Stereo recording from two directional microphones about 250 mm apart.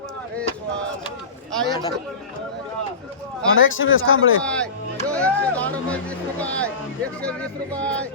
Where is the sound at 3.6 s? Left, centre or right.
Left.